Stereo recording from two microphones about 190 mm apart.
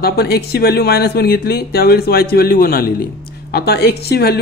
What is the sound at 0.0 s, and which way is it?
Speech, 55° left (ahead or behind).